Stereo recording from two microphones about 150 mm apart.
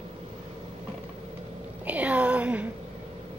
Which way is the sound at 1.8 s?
10° right (ahead or behind).